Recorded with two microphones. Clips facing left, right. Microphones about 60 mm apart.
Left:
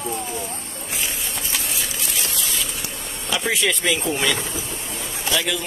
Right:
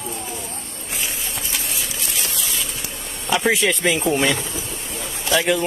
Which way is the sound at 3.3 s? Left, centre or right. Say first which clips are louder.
Right 4 dB; right.